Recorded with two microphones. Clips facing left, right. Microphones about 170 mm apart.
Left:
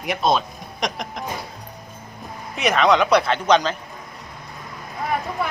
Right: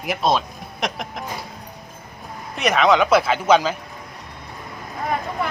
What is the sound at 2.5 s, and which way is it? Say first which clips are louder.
Speech: right 1 dB; centre (ahead or behind).